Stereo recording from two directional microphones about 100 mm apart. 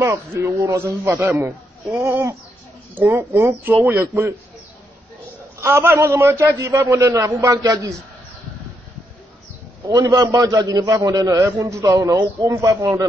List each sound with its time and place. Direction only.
0.0 s a man's voice: 30° right (ahead or behind)
5.6 s a man's voice: 25° right (ahead or behind)
9.8 s a man's voice: 35° right (ahead or behind)